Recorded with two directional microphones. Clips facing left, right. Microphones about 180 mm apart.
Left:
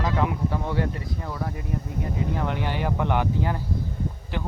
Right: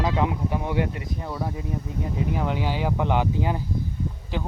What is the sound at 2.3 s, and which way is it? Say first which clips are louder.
Speech: right 1 dB; 10° right (ahead or behind).